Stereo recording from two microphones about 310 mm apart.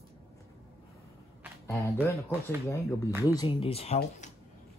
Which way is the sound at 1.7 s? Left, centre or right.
Centre.